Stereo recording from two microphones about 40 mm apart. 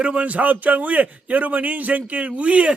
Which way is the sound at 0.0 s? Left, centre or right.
Right.